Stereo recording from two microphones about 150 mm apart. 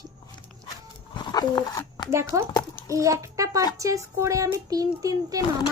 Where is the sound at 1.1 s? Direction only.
30° left (ahead or behind).